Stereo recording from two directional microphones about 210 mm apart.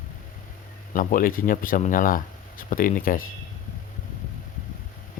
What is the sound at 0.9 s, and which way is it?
Speech, 40° left (ahead or behind).